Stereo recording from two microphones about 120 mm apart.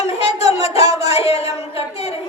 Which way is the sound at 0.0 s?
60° left (ahead or behind).